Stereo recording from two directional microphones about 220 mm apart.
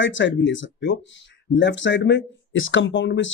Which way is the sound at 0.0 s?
55° left (ahead or behind).